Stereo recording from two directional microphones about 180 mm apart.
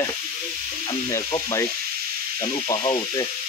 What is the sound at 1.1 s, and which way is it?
Sizzle, 15° left (ahead or behind).